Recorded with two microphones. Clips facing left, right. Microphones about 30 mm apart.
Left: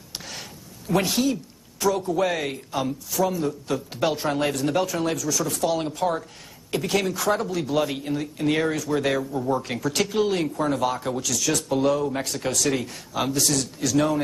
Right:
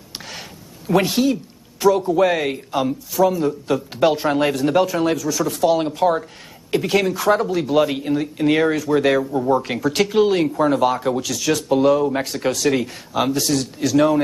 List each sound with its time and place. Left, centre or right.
0.3 s speech: centre